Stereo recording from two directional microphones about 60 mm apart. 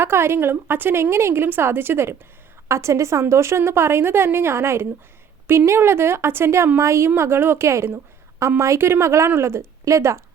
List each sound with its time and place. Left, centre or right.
0.0 s a woman's voice: right
2.6 s a woman's voice: right